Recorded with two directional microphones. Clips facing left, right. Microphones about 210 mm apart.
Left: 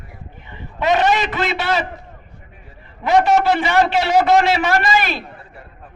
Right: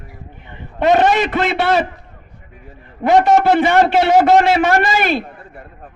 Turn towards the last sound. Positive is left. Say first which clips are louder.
# right 3 dB
turn(degrees=-50)  # may be behind; listen again after turning